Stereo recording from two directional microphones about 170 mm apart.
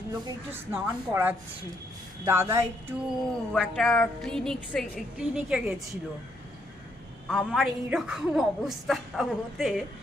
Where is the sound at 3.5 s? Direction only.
5° left (ahead or behind).